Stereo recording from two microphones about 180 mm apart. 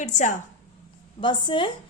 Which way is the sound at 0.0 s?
40° left (ahead or behind).